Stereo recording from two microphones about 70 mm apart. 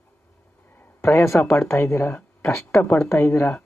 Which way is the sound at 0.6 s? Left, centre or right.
Left.